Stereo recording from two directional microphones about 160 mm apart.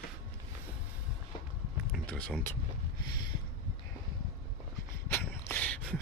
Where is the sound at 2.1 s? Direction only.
5° left (ahead or behind).